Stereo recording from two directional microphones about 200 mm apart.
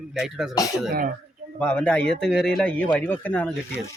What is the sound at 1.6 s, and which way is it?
Speech, 5° left (ahead or behind).